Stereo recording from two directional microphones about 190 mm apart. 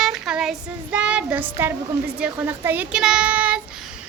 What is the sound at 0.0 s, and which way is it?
Child singing, 5° right (ahead or behind).